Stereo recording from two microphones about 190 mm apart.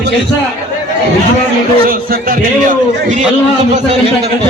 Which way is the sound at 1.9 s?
50° right (ahead or behind).